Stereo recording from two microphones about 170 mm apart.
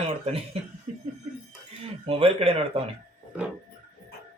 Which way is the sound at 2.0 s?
35° right (ahead or behind).